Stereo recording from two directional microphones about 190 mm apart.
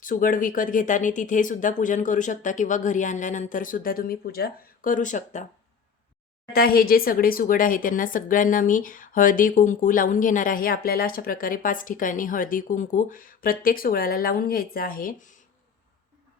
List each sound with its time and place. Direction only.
0.0 s speech: 45° left (ahead or behind)
6.5 s speech: 50° left (ahead or behind)